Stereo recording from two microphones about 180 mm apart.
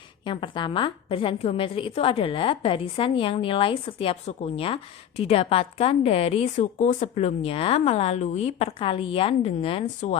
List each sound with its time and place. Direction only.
0.3 s a woman's voice: 25° left (ahead or behind)